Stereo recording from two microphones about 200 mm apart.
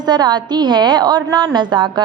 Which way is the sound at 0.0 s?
20° right (ahead or behind).